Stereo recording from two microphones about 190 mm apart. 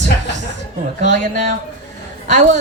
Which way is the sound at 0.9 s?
40° right (ahead or behind).